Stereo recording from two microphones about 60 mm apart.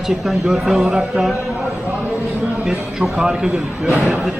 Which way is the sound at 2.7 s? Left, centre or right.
Centre.